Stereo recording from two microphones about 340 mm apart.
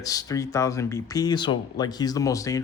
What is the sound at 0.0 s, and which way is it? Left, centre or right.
Speech, centre.